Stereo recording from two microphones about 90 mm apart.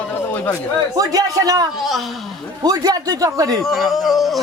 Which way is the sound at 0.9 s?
45° right (ahead or behind).